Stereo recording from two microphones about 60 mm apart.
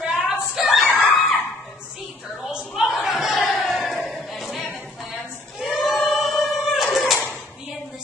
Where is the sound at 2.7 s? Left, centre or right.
Centre.